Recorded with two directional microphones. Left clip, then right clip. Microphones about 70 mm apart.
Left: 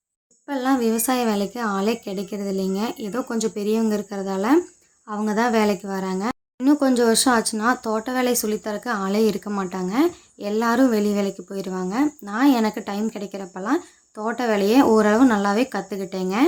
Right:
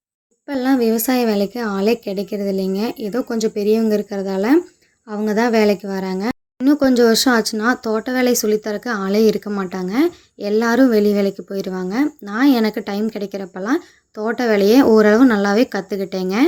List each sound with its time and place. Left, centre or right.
0.4 s speech: right